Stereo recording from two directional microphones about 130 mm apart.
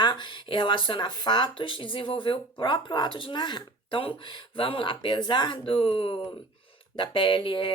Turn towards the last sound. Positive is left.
turn(degrees=40)  # may be behind; listen again after turning